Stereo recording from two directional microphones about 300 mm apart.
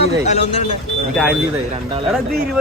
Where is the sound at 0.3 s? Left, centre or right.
Left.